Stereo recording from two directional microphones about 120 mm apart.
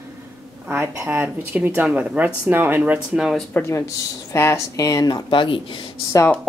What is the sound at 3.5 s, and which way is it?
Speech, 25° left (ahead or behind).